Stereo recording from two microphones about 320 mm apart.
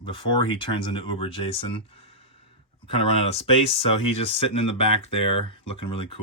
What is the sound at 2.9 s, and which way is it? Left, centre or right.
Speech, centre.